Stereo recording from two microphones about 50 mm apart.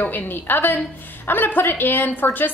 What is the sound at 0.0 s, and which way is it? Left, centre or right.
A woman's voice, left.